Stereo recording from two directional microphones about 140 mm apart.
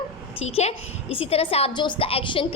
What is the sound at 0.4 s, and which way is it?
A woman's voice, 50° left (ahead or behind).